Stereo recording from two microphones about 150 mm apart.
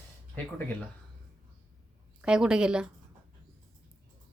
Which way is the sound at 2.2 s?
5° right (ahead or behind).